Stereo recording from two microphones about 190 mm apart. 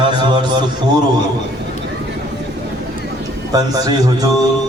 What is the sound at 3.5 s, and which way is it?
Speech, 20° right (ahead or behind).